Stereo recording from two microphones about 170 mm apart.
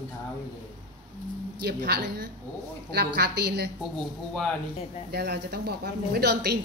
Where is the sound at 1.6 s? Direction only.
70° right (ahead or behind).